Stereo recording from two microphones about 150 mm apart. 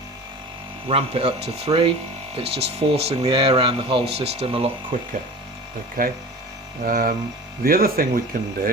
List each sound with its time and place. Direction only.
0.9 s speech: 40° right (ahead or behind)
4.9 s speech: 65° right (ahead or behind)